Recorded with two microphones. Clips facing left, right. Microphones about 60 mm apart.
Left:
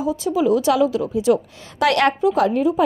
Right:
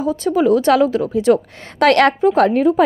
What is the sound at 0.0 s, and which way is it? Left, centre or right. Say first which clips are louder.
A woman's voice: right 3 dB; right.